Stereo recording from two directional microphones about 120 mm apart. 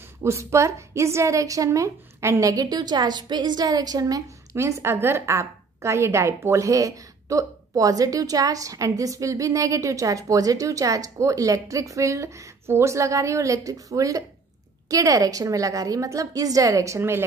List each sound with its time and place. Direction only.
0.2 s a woman's voice: 25° right (ahead or behind)